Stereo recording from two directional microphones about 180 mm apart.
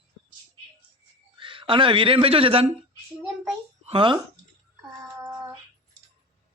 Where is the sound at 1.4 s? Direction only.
30° right (ahead or behind).